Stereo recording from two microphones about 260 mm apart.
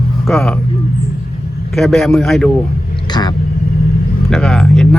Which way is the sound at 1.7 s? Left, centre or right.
Centre.